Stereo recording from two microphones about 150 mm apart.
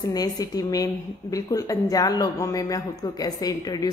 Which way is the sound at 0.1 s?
25° left (ahead or behind).